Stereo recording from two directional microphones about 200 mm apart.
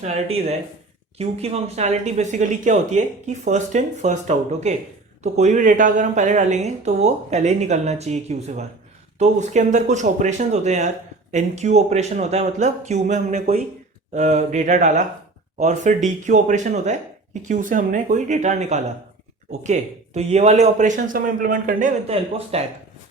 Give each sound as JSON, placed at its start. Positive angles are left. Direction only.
{"t": 0.0, "sound": "speech", "side_deg": -30}